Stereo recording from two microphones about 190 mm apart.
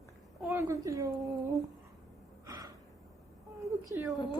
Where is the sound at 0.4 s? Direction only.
15° right (ahead or behind).